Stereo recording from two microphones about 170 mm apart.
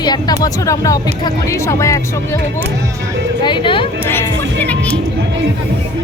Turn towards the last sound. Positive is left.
turn(degrees=10)  # may be behind; listen again after turning